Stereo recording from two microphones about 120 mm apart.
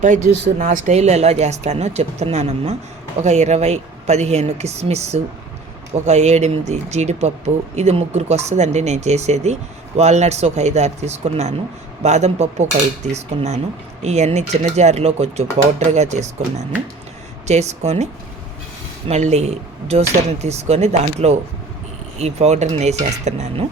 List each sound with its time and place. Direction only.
0.0 s speech: 80° right